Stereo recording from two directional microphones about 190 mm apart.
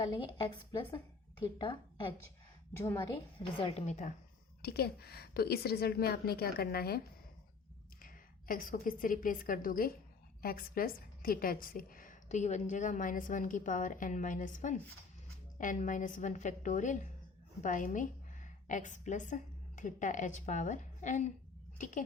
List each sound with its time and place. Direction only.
0.0 s speech: 25° left (ahead or behind)
2.7 s a woman's voice: 15° left (ahead or behind)
3.3 s a woman's voice: 30° left (ahead or behind)
4.6 s a woman's voice: 55° left (ahead or behind)
8.0 s a woman's voice: 45° left (ahead or behind)